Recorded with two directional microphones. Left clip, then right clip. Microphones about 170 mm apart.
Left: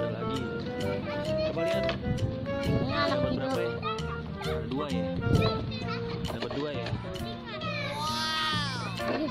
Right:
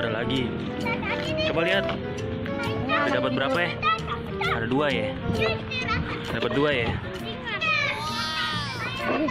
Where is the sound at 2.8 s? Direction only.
45° left (ahead or behind).